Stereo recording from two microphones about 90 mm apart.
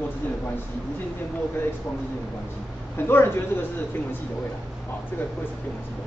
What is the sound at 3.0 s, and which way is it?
Speech, 25° left (ahead or behind).